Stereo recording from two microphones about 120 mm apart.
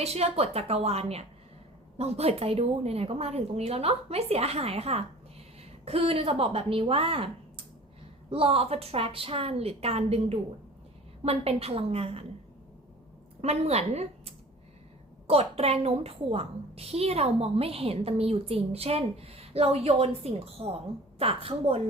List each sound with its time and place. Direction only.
0.0 s a woman's voice: 60° right (ahead or behind)
13.4 s a woman's voice: 60° right (ahead or behind)